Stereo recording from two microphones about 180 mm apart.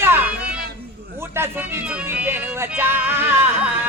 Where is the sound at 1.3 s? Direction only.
15° right (ahead or behind).